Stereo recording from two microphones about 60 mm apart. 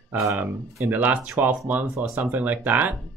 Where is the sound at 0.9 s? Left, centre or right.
Right.